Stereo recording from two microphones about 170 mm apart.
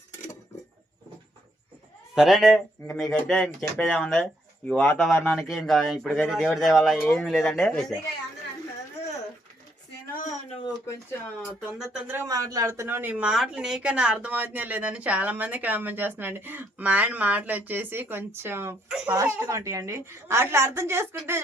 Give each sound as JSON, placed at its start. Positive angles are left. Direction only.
{"t": 2.1, "sound": "speech", "side_deg": 0}
{"t": 11.4, "sound": "speech", "side_deg": -5}
{"t": 12.1, "sound": "speech", "side_deg": -20}